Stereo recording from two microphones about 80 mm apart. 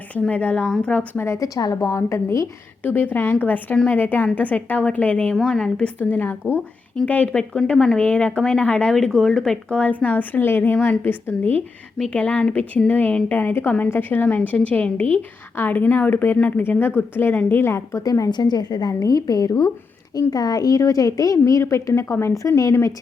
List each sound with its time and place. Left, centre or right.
0.1 s speech: centre
1.2 s a woman's voice: left
2.8 s a woman's voice: left
18.0 s a woman's voice: left
18.3 s a woman's voice: left